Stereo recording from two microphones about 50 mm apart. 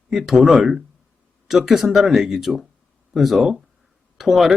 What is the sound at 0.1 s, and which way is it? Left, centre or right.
Speech, centre.